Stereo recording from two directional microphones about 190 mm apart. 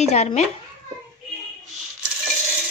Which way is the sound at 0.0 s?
35° left (ahead or behind).